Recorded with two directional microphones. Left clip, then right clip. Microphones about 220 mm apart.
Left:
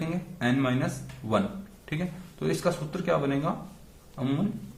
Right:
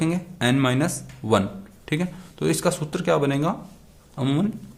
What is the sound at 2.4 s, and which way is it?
A man's voice, 50° right (ahead or behind).